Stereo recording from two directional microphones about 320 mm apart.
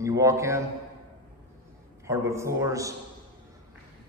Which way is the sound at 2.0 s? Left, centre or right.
Centre.